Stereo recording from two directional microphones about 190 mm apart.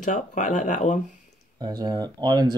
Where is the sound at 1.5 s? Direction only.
20° right (ahead or behind).